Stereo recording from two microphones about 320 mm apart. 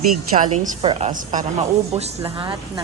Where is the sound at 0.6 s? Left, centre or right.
Centre.